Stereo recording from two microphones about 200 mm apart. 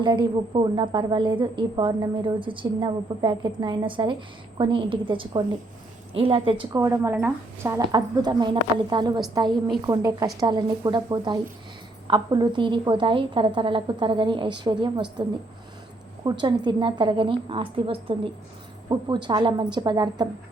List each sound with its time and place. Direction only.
0.0 s a woman's voice: 25° right (ahead or behind)
6.7 s a woman's voice: 15° right (ahead or behind)
16.2 s a woman's voice: 20° right (ahead or behind)